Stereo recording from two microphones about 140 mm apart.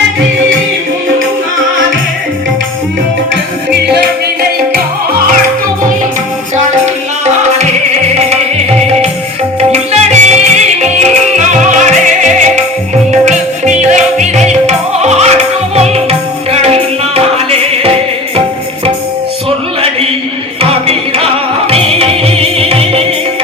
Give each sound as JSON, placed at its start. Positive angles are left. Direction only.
{"t": 9.6, "sound": "music", "side_deg": -50}
{"t": 20.6, "sound": "music", "side_deg": -45}